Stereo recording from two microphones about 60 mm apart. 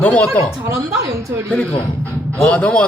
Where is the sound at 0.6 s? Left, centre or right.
Right.